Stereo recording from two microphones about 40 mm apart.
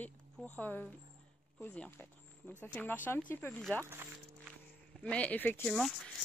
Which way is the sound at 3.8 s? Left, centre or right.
Right.